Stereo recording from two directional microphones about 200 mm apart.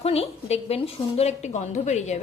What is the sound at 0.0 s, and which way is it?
A woman's voice, 30° left (ahead or behind).